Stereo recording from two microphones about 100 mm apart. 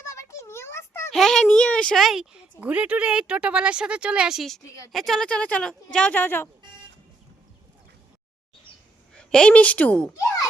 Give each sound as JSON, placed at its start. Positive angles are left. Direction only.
{"t": 0.0, "sound": "a sound", "side_deg": 30}
{"t": 1.1, "sound": "speech", "side_deg": 5}
{"t": 2.6, "sound": "a woman's voice", "side_deg": -15}
{"t": 9.1, "sound": "a woman's voice", "side_deg": 10}